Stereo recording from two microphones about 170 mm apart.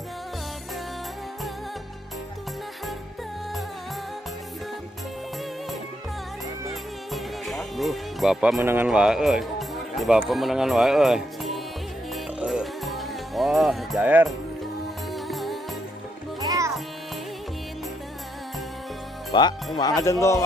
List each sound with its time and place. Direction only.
6.7 s music: centre (ahead or behind)
8.6 s speech: 10° right (ahead or behind)
12.1 s music: 5° right (ahead or behind)
16.3 s music: 20° right (ahead or behind)
19.3 s speech: 25° left (ahead or behind)